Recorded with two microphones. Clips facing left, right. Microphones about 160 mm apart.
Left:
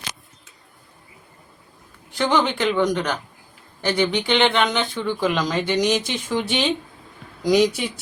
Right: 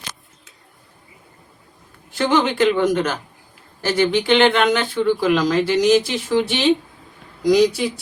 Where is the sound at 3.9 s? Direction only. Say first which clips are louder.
Right 4 dB; 5° right (ahead or behind).